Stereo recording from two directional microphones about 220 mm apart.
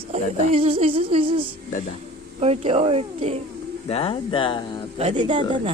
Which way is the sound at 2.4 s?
30° right (ahead or behind).